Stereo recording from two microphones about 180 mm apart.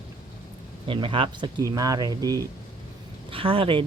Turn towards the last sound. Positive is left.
turn(degrees=-30)  # may be behind; listen again after turning